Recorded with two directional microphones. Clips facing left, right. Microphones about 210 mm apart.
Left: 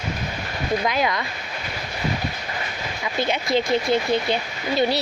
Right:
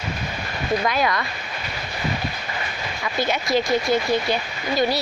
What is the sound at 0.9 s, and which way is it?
Speech, 20° left (ahead or behind).